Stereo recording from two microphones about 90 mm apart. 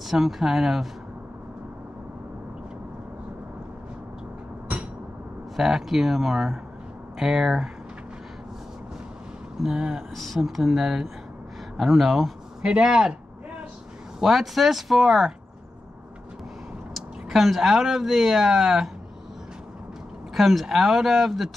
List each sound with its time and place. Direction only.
0.0 s speech: 5° right (ahead or behind)
5.6 s speech: 5° right (ahead or behind)
9.6 s speech: 5° right (ahead or behind)
14.2 s speech: centre (ahead or behind)
16.9 s speech: centre (ahead or behind)
20.3 s speech: centre (ahead or behind)